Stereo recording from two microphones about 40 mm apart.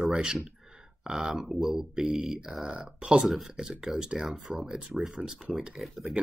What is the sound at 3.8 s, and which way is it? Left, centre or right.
Speech, centre.